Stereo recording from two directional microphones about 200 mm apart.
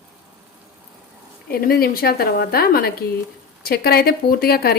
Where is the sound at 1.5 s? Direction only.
50° left (ahead or behind).